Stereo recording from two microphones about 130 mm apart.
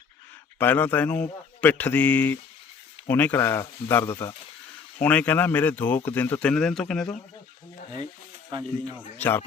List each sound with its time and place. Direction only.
0.6 s a man's voice: 15° left (ahead or behind)
9.0 s a man's voice: 15° left (ahead or behind)